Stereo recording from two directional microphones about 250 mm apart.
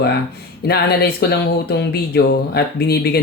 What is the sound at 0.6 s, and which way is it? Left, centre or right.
Speech, left.